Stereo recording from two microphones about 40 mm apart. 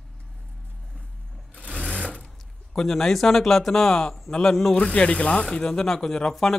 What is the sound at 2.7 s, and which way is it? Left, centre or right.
Speech, centre.